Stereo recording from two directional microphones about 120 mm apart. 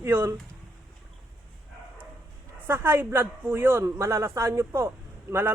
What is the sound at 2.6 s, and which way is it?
A man's voice, 20° right (ahead or behind).